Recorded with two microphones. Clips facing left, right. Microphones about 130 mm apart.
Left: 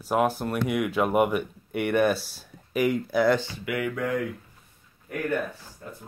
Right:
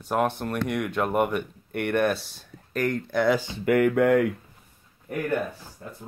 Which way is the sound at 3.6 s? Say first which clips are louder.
Right 10 dB; 55° right (ahead or behind).